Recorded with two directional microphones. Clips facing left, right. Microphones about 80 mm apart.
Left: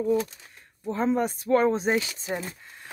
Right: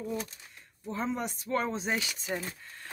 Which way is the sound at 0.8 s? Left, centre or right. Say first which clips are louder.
Left 8 dB; left.